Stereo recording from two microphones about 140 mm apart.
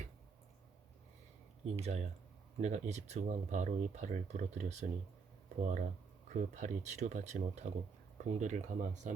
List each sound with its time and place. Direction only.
1.6 s speech: 50° right (ahead or behind)